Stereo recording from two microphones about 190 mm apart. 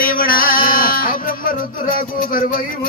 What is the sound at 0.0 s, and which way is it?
Music, 50° left (ahead or behind).